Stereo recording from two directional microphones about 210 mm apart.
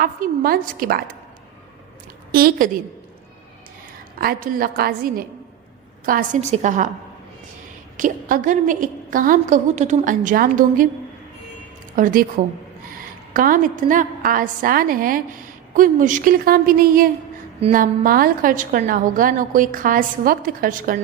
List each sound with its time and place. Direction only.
0.0 s a woman's voice: 45° right (ahead or behind)
2.3 s a woman's voice: 45° right (ahead or behind)
4.2 s a woman's voice: 45° right (ahead or behind)
7.9 s a woman's voice: 40° right (ahead or behind)
11.9 s a woman's voice: 40° right (ahead or behind)
13.3 s a woman's voice: 40° right (ahead or behind)